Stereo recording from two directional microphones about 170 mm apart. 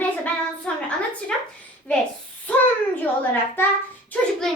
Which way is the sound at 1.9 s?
5° left (ahead or behind).